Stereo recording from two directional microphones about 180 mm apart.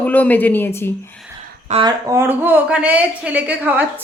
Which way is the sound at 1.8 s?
15° right (ahead or behind).